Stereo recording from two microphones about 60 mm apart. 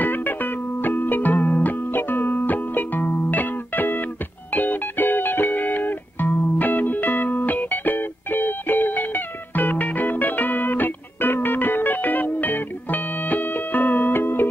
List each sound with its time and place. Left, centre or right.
0.0 s music: left